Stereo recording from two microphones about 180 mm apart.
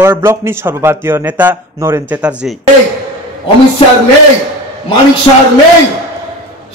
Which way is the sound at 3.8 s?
30° left (ahead or behind).